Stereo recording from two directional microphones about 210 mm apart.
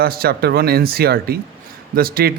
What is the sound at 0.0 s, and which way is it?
A man's voice, 45° right (ahead or behind).